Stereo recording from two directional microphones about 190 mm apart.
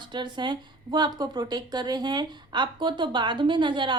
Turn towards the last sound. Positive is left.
turn(degrees=-25)  # may be behind; listen again after turning